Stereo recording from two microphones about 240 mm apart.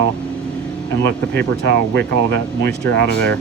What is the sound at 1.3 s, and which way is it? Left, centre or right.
Speech, right.